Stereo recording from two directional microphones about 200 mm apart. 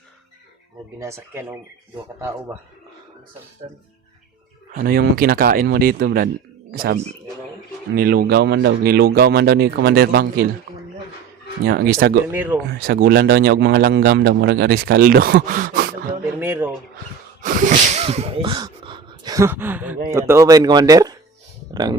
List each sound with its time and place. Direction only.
0.9 s speech: 15° right (ahead or behind)
4.7 s a man's voice: 50° right (ahead or behind)
11.6 s a man's voice: 50° right (ahead or behind)
12.3 s speech: 10° right (ahead or behind)
12.8 s a man's voice: 50° right (ahead or behind)
16.4 s speech: 10° right (ahead or behind)
17.4 s a sound: 40° right (ahead or behind); by 20.0 s 10° right (ahead or behind)
20.1 s speech: 15° right (ahead or behind)
21.7 s a sound: 20° right (ahead or behind)